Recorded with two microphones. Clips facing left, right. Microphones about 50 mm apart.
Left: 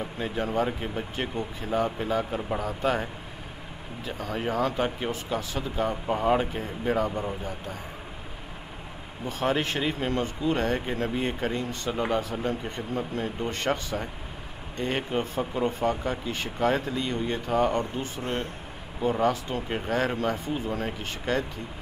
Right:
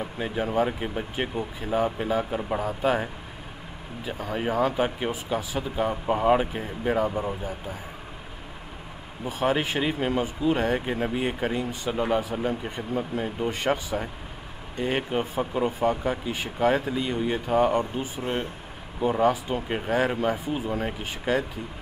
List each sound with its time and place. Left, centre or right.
0.0 s speech: centre
9.2 s speech: centre